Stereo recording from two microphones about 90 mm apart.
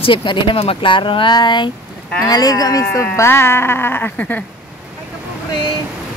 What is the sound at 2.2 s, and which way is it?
Speech, 45° left (ahead or behind).